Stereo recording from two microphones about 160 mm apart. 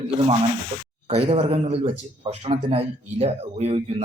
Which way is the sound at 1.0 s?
40° right (ahead or behind).